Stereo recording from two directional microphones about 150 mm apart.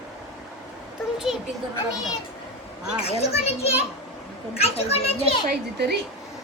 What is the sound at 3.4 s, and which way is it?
A child's voice, 45° left (ahead or behind).